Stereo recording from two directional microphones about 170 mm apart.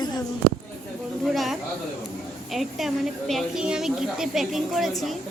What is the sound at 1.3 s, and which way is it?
A woman's voice, centre (ahead or behind).